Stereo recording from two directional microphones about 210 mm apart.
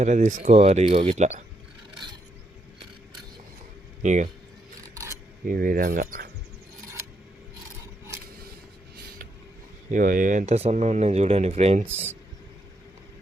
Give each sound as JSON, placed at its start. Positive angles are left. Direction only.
{"t": 0.0, "sound": "speech", "side_deg": -35}
{"t": 4.0, "sound": "speech", "side_deg": -35}
{"t": 5.5, "sound": "speech", "side_deg": -40}
{"t": 9.9, "sound": "speech", "side_deg": -40}